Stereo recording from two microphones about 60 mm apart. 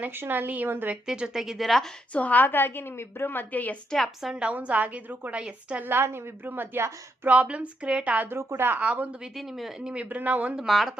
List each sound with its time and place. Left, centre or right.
0.0 s a woman's voice: right
1.0 s a woman's voice: centre
2.1 s a woman's voice: left
3.9 s speech: centre
4.3 s a woman's voice: centre
5.8 s a woman's voice: right
7.3 s a woman's voice: right
8.3 s a woman's voice: right
8.8 s a woman's voice: right
9.2 s speech: centre
9.9 s a woman's voice: right
10.7 s speech: centre